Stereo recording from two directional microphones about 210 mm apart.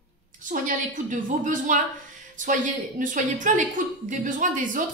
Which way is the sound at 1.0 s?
40° right (ahead or behind).